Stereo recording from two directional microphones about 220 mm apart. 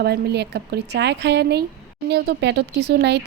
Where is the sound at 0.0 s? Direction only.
50° right (ahead or behind).